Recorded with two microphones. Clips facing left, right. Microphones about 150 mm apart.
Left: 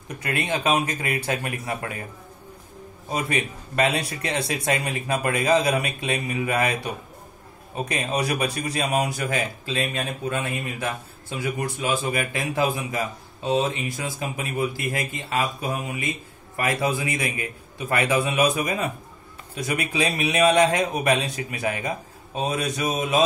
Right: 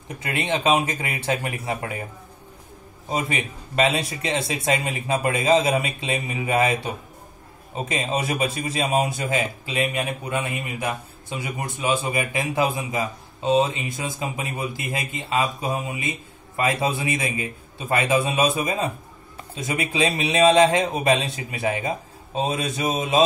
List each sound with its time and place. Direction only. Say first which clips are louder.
0.1 s a man's voice: right 1 dB; 20° right (ahead or behind)
3.1 s a man's voice: even; 20° right (ahead or behind)